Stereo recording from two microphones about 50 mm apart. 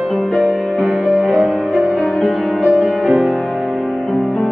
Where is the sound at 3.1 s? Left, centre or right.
Centre.